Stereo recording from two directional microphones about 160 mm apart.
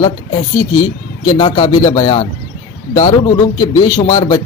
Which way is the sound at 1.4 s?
30° left (ahead or behind).